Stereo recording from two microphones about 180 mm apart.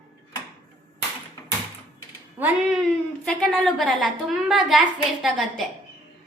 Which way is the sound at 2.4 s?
10° right (ahead or behind).